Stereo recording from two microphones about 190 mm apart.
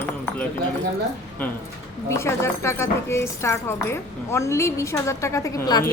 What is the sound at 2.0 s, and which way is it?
A woman's voice, 15° left (ahead or behind).